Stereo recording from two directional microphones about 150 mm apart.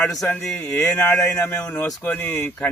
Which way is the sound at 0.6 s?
20° left (ahead or behind).